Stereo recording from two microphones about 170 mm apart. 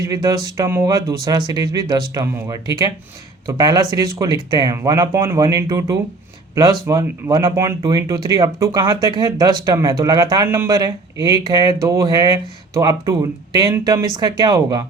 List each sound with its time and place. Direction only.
0.1 s speech: 20° right (ahead or behind)